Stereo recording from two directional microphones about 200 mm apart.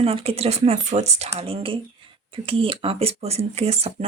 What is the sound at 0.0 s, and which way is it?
Speech, 30° right (ahead or behind).